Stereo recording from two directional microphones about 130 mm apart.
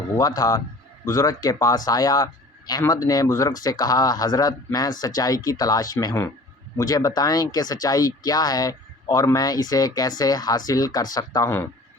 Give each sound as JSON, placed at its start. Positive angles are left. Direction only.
{"t": 0.2, "sound": "speech", "side_deg": 30}